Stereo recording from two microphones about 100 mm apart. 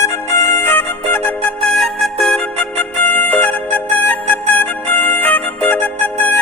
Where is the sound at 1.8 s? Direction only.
5° left (ahead or behind).